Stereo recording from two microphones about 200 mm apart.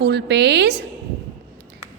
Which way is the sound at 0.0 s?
60° right (ahead or behind).